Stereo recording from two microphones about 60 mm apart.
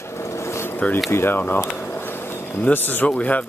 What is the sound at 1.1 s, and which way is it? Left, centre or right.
Speech, left.